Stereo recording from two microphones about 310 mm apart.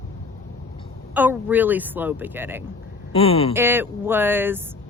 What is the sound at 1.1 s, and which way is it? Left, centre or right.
Speech, centre.